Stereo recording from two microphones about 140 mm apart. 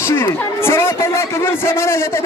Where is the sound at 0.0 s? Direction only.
20° left (ahead or behind).